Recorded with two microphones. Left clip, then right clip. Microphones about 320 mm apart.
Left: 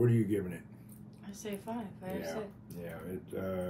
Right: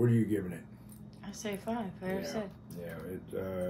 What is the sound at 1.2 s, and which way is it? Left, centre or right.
Speech, right.